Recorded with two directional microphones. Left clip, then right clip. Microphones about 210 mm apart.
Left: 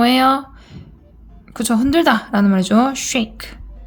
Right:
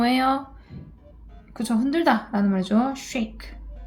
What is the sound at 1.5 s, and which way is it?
A woman's voice, 35° left (ahead or behind).